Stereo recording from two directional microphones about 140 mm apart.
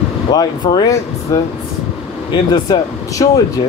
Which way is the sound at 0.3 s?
30° left (ahead or behind).